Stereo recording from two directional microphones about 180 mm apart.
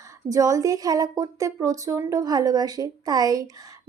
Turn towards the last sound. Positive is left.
turn(degrees=-20)  # may be behind; listen again after turning